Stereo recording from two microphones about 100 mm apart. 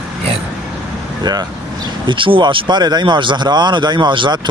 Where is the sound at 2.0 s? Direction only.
60° right (ahead or behind).